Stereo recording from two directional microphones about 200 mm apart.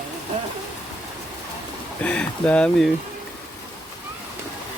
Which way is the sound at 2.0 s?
5° left (ahead or behind).